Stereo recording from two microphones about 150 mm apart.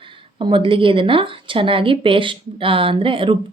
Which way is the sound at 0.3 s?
35° right (ahead or behind).